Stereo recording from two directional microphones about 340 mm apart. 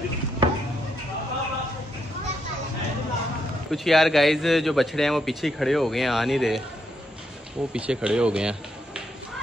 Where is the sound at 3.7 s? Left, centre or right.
Centre.